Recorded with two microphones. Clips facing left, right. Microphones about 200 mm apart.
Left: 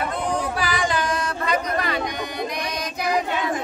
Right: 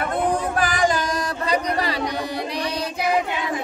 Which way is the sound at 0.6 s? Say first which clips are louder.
Right 3 dB; 45° right (ahead or behind).